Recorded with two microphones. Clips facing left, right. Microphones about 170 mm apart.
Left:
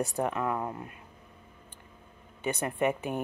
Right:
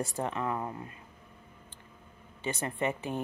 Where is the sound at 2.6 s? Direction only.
15° left (ahead or behind).